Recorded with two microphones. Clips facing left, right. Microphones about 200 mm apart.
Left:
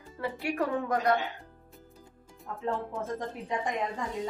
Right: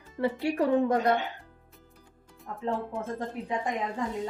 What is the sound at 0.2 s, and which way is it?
Speech, 30° right (ahead or behind).